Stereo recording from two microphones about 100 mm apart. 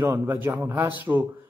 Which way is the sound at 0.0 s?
20° right (ahead or behind).